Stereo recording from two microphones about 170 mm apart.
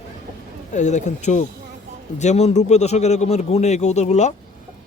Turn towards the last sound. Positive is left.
turn(degrees=45)  # may be behind; listen again after turning